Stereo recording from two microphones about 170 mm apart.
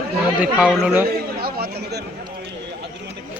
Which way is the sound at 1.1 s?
65° right (ahead or behind).